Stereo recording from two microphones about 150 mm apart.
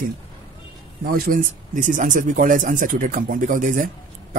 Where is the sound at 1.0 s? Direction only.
75° right (ahead or behind).